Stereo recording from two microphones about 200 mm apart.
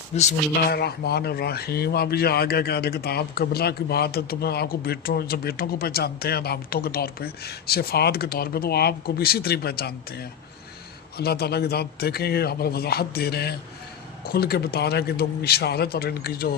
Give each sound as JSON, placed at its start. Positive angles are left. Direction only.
{"t": 0.1, "sound": "speech", "side_deg": 30}
{"t": 0.7, "sound": "a man's voice", "side_deg": 55}